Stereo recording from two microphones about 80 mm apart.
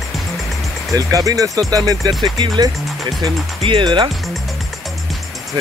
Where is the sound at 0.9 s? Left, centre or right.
Right.